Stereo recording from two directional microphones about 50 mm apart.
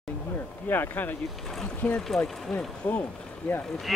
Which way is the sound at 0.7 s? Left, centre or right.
Left.